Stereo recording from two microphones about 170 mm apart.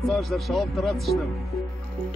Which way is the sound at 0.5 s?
Centre (ahead or behind).